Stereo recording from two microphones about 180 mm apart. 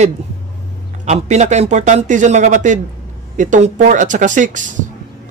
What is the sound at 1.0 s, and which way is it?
Speech, 40° right (ahead or behind).